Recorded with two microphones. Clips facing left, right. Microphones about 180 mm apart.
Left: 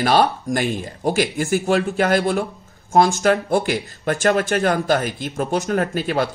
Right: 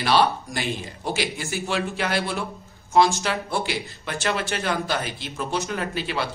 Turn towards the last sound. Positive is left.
turn(degrees=45)  # may be behind; listen again after turning